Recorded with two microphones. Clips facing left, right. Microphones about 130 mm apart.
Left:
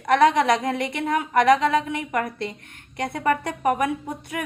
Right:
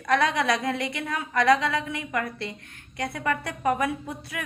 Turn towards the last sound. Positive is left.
turn(degrees=20)  # may be behind; listen again after turning